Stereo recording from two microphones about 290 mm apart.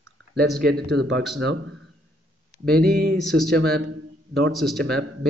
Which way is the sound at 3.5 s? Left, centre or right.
Right.